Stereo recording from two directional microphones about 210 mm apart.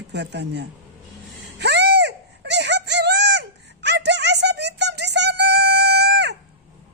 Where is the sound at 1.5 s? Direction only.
55° right (ahead or behind).